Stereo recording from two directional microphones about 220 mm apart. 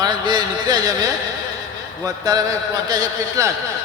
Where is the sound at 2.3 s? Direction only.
15° right (ahead or behind).